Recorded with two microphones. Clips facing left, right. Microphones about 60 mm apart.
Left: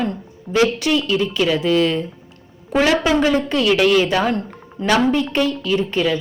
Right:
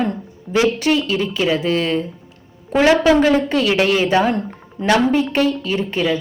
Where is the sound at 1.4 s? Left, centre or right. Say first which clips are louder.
Left 2 dB; centre.